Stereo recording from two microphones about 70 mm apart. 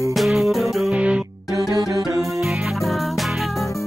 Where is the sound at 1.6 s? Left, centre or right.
Right.